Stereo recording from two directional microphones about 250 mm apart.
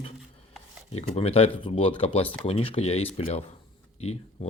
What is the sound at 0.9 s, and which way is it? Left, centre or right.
Speech, left.